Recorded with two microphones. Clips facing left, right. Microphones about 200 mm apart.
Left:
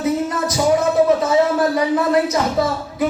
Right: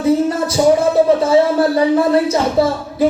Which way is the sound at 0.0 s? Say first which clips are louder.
Right 5 dB; 30° right (ahead or behind).